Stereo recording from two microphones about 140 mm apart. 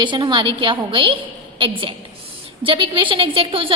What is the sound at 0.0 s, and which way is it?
A woman's voice, 35° right (ahead or behind).